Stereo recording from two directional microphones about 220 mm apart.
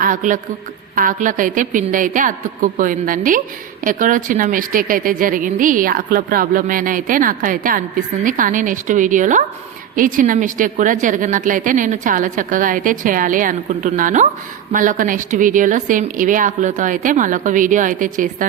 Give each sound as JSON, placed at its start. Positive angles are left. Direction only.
{"t": 0.0, "sound": "a woman's voice", "side_deg": -35}